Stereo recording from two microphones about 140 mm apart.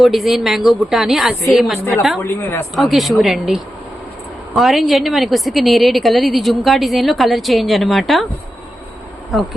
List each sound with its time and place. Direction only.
0.0 s a woman's voice: centre (ahead or behind)
2.2 s a woman's voice: 20° left (ahead or behind)
2.7 s a woman's voice: centre (ahead or behind)